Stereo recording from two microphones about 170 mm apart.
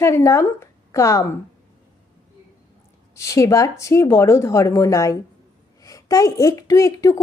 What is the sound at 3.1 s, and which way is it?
A woman's voice, 15° left (ahead or behind).